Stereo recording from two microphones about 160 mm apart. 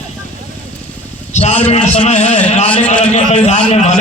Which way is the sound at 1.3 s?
45° left (ahead or behind).